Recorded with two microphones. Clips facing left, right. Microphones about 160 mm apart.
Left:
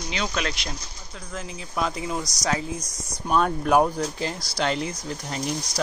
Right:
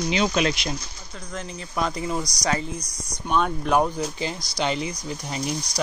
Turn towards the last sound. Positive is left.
turn(degrees=-5)  # may be behind; listen again after turning